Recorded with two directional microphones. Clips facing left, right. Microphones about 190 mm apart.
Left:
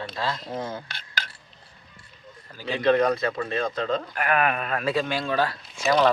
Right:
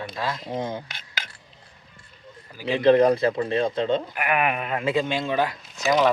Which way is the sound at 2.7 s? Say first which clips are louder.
Right 4 dB; 30° right (ahead or behind).